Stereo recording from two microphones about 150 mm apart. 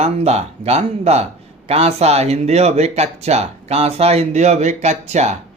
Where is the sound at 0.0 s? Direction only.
45° right (ahead or behind).